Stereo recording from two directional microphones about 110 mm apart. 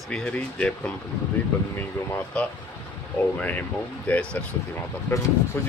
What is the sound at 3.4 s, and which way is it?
Speech, 15° left (ahead or behind).